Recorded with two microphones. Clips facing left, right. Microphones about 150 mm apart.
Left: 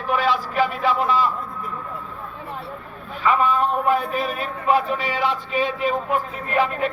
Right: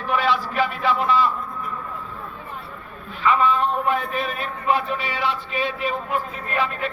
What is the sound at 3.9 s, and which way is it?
Speech, 40° left (ahead or behind).